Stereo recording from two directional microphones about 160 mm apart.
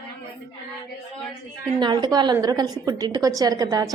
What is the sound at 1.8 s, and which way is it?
A woman's voice, 25° right (ahead or behind).